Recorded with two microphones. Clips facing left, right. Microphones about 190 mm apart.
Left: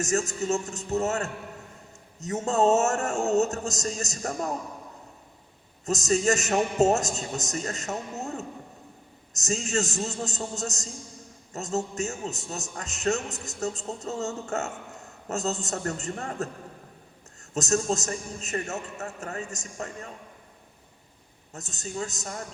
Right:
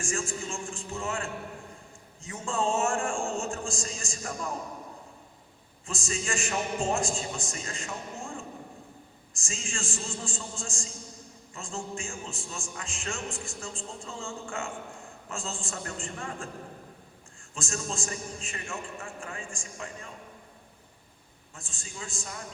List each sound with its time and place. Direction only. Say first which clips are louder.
0.0 s a man's voice: left 6 dB; 40° left (ahead or behind)
5.8 s a man's voice: left 11 dB; 40° left (ahead or behind)
17.5 s a man's voice: left 10 dB; 40° left (ahead or behind)
21.5 s a man's voice: left 10 dB; 40° left (ahead or behind)